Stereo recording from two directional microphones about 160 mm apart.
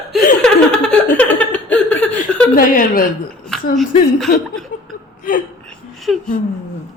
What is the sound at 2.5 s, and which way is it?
Speech, 60° left (ahead or behind).